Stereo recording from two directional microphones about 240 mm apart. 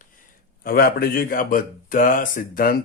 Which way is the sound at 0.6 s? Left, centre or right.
Left.